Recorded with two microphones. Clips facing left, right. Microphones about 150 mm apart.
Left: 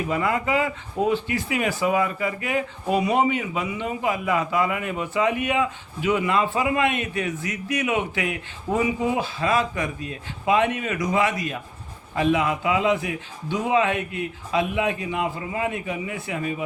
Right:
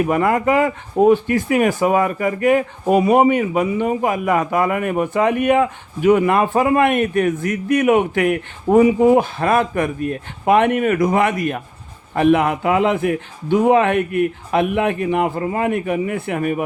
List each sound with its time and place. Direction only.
0.0 s a man's voice: 55° right (ahead or behind)